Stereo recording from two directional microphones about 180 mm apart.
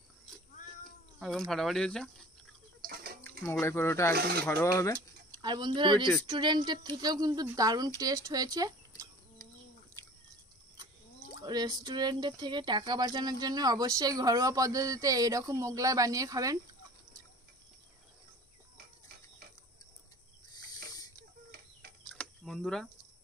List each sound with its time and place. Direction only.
0.6 s cat: 45° left (ahead or behind)
1.2 s speech: centre (ahead or behind)
2.8 s water: 55° right (ahead or behind)
3.4 s speech: 15° left (ahead or behind)
4.1 s speech: 60° right (ahead or behind)
4.5 s speech: 15° left (ahead or behind)
4.9 s speech: 25° right (ahead or behind)
11.4 s speech: 20° right (ahead or behind)
20.5 s a sound: 20° left (ahead or behind)
22.1 s a sound: 5° left (ahead or behind)